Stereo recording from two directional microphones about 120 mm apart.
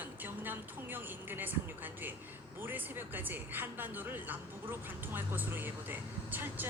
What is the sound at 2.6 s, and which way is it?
A woman's voice, 15° right (ahead or behind).